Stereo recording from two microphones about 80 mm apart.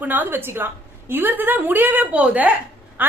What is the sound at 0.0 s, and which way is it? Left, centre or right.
A woman's voice, right.